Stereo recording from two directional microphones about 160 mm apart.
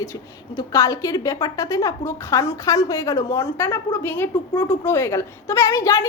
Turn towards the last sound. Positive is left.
turn(degrees=20)  # may be behind; listen again after turning